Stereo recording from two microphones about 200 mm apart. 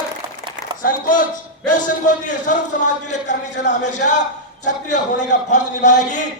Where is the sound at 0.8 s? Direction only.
40° left (ahead or behind).